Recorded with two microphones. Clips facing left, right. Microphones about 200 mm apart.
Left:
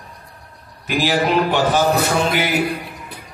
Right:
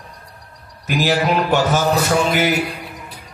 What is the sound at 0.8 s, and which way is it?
Speech, 45° right (ahead or behind).